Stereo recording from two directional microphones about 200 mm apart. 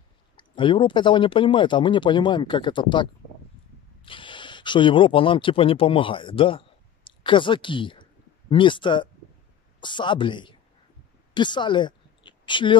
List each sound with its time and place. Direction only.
0.4 s a woman's voice: 25° left (ahead or behind)